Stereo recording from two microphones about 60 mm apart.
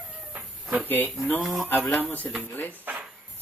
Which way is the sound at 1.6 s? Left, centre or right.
Left.